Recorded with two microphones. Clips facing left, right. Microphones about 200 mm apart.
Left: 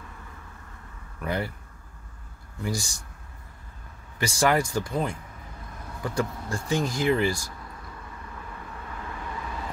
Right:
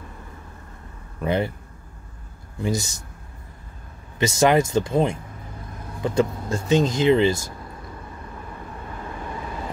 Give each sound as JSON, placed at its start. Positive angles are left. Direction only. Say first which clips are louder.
{"t": 1.2, "sound": "speech", "louder": "right 7 dB", "side_deg": -20}
{"t": 2.6, "sound": "speech", "louder": "right 6 dB", "side_deg": -20}
{"t": 4.2, "sound": "speech", "louder": "right 6 dB", "side_deg": -20}
{"t": 8.4, "sound": "vehicle", "louder": "right 3 dB", "side_deg": -30}